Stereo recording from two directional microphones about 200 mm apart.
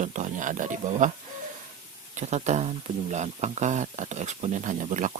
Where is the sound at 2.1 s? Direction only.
35° right (ahead or behind).